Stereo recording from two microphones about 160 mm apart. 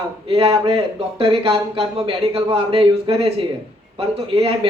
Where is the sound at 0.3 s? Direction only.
35° right (ahead or behind).